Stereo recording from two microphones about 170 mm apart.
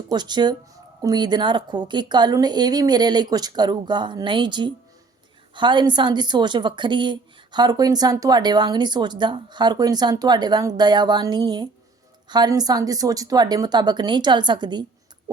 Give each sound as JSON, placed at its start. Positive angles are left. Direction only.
{"t": 0.1, "sound": "a woman's voice", "side_deg": -25}